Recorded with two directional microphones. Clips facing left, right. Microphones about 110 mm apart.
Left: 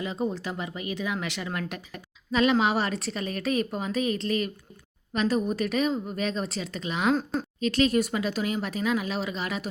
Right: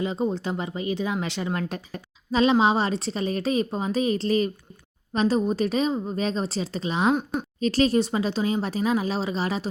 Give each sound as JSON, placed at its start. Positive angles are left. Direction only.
{"t": 0.0, "sound": "speech", "side_deg": -30}